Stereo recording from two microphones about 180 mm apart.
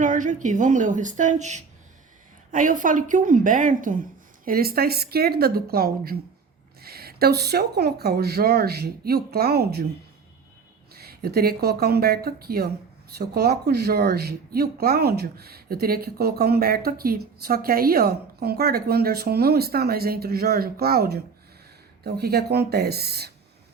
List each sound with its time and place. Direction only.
0.0 s a woman's voice: 45° right (ahead or behind); by 9.8 s 60° right (ahead or behind)
10.9 s a woman's voice: 60° right (ahead or behind)